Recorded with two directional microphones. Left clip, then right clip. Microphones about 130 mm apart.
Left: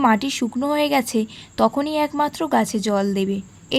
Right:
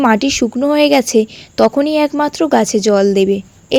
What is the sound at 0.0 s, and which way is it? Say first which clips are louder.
A woman's voice: right 6 dB; 30° right (ahead or behind).